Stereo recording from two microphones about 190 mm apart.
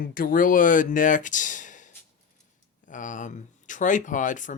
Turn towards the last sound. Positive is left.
turn(degrees=40)  # may be behind; listen again after turning